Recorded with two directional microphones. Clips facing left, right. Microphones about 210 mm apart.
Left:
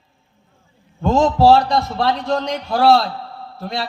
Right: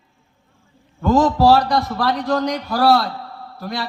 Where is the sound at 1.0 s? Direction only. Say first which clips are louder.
Left 1 dB; 25° left (ahead or behind).